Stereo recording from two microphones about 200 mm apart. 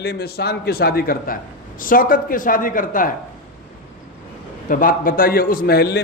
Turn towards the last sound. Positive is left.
turn(degrees=55)  # may be behind; listen again after turning